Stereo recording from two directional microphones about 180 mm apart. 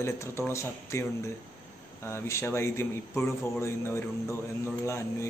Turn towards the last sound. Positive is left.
turn(degrees=15)  # may be behind; listen again after turning